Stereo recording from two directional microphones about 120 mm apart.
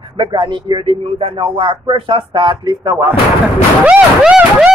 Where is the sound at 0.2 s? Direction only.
40° right (ahead or behind).